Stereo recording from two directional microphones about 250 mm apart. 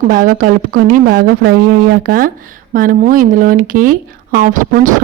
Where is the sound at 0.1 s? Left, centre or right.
Right.